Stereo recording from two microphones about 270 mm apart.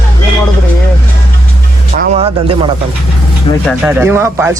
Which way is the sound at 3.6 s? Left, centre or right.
Centre.